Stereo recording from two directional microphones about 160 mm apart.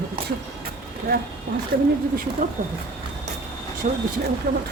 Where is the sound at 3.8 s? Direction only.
50° right (ahead or behind).